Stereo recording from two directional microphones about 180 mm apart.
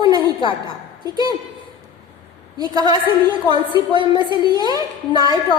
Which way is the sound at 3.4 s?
25° left (ahead or behind).